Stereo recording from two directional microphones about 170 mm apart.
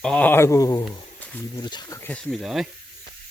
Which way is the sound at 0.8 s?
10° left (ahead or behind).